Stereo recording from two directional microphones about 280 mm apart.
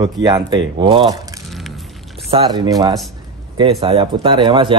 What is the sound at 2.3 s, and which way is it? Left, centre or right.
Speech, centre.